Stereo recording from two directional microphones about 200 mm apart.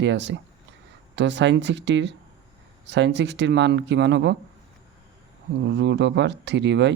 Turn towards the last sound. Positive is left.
turn(degrees=-60)  # may be behind; listen again after turning